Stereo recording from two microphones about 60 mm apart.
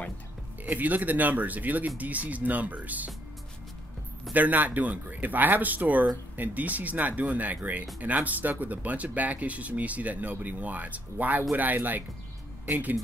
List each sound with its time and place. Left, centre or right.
0.7 s speech: right
4.3 s speech: right